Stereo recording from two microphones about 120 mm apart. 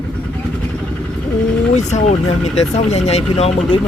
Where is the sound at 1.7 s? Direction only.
75° left (ahead or behind).